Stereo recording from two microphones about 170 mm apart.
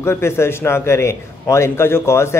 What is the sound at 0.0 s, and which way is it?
A man's voice, 15° left (ahead or behind).